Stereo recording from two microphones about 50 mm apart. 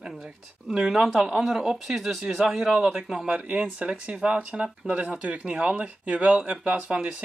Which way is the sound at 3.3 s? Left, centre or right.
Right.